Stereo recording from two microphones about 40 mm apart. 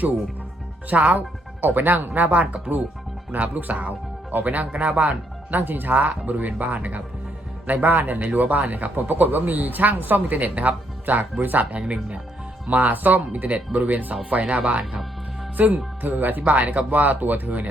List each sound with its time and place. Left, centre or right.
0.9 s speech: right
1.6 s speech: right
2.2 s speech: right
15.5 s speech: right
16.4 s speech: right